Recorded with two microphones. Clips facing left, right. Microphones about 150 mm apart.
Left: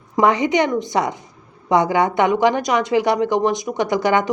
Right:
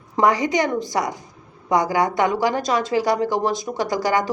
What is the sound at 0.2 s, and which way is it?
Speech, 20° left (ahead or behind).